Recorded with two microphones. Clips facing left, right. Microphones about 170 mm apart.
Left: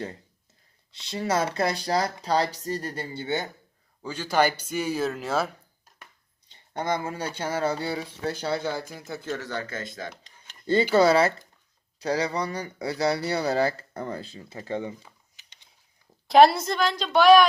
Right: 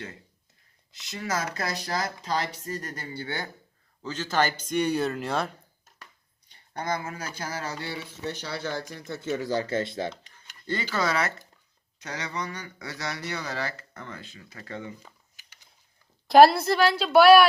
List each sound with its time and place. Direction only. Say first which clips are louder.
0.9 s speech: left 5 dB; 30° left (ahead or behind)
4.0 s speech: left 3 dB; 10° left (ahead or behind)
6.5 s speech: left 3 dB; 25° left (ahead or behind)
8.9 s speech: even; 5° left (ahead or behind)
9.5 s speech: right 6 dB; 30° right (ahead or behind)
10.4 s speech: left 9 dB; 25° left (ahead or behind)
16.2 s a woman's voice: right 1 dB; centre (ahead or behind)